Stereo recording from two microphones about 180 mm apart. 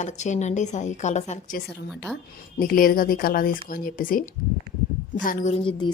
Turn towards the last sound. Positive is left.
turn(degrees=40)  # may be behind; listen again after turning